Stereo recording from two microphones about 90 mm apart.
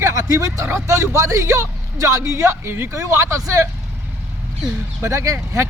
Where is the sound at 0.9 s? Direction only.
35° right (ahead or behind).